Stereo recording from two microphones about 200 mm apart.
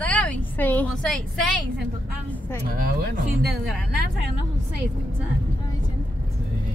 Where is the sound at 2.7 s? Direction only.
45° right (ahead or behind).